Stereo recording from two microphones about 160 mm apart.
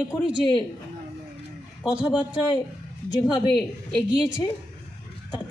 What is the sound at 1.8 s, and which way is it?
Speech, 5° right (ahead or behind).